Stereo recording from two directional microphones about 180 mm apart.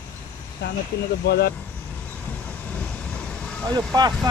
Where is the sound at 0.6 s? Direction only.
70° left (ahead or behind).